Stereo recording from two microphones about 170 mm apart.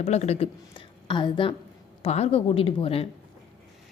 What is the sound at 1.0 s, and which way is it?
A woman's voice, 30° left (ahead or behind).